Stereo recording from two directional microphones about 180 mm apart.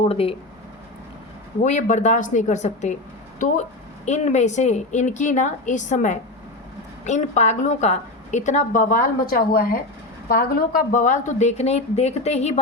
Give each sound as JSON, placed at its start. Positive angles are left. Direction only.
{"t": 0.1, "sound": "a woman's voice", "side_deg": 30}
{"t": 1.6, "sound": "a woman's voice", "side_deg": 40}
{"t": 4.0, "sound": "a woman's voice", "side_deg": 40}